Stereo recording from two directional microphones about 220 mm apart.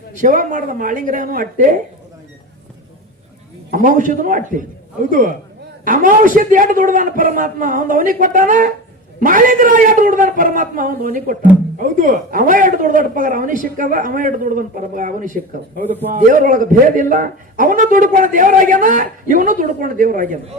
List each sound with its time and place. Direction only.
0.2 s a man's voice: 35° right (ahead or behind)
3.7 s a man's voice: 35° right (ahead or behind)
5.8 s a man's voice: 35° right (ahead or behind)